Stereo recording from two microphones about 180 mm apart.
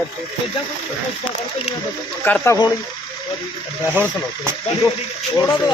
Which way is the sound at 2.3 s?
10° left (ahead or behind).